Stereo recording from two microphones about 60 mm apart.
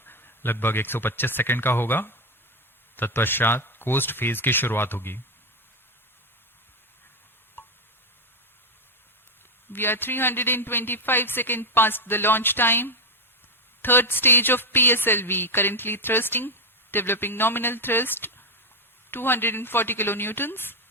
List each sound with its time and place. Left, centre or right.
0.0 s a woman's voice: left
7.6 s a sound: left
9.7 s a woman's voice: left